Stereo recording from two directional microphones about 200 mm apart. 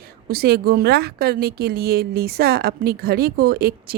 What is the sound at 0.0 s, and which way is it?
A woman's voice, 50° right (ahead or behind).